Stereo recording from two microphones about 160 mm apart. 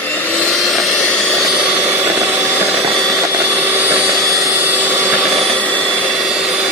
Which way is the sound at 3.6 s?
10° right (ahead or behind).